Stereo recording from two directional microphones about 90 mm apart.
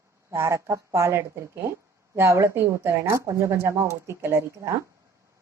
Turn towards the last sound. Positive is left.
turn(degrees=-35)  # may be behind; listen again after turning